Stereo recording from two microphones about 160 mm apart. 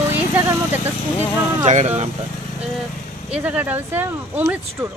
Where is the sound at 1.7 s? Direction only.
45° right (ahead or behind).